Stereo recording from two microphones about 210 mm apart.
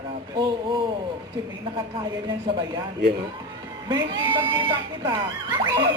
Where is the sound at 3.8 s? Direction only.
20° right (ahead or behind).